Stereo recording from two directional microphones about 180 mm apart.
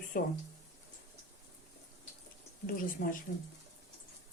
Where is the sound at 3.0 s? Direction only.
50° left (ahead or behind).